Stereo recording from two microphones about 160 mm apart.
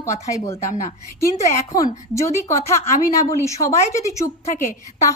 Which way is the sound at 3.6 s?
20° left (ahead or behind).